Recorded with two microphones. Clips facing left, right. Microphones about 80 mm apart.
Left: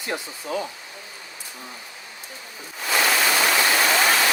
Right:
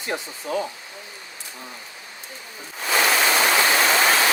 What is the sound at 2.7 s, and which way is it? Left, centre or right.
Waterfall, right.